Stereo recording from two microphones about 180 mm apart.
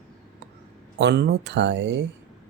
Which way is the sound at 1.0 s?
65° right (ahead or behind).